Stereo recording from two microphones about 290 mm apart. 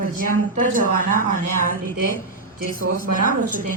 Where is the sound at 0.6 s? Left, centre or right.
Right.